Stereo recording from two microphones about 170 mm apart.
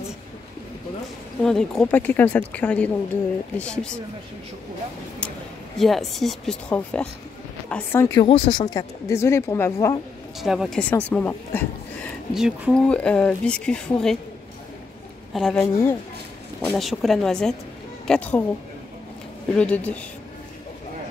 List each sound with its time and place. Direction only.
1.4 s speech: 5° left (ahead or behind)
5.8 s speech: centre (ahead or behind)
10.4 s speech: centre (ahead or behind)
10.8 s speech: 10° left (ahead or behind)
12.4 s speech: 5° right (ahead or behind)
15.3 s speech: centre (ahead or behind)
15.6 s speech: 15° left (ahead or behind)
16.6 s speech: centre (ahead or behind)
19.5 s speech: 5° left (ahead or behind)